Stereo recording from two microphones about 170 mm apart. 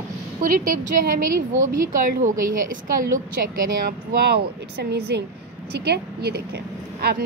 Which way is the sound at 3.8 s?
70° right (ahead or behind).